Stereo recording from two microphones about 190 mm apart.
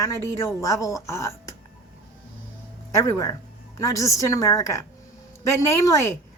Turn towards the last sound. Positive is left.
turn(degrees=15)  # may be behind; listen again after turning